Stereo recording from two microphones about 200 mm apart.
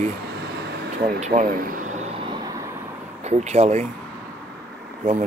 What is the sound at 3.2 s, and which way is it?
Speech, 35° right (ahead or behind).